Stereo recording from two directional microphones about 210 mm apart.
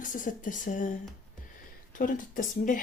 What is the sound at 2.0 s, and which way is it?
Speech, 40° left (ahead or behind).